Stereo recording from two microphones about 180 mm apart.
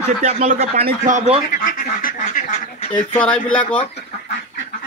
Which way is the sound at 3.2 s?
5° left (ahead or behind).